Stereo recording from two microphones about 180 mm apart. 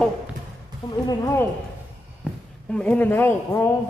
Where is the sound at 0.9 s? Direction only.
20° left (ahead or behind).